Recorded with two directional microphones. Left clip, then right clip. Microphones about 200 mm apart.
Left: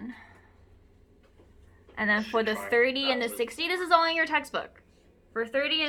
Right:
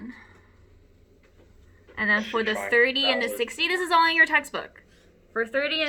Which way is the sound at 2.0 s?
10° left (ahead or behind).